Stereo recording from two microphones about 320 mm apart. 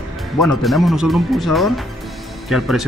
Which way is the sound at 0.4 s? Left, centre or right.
Centre.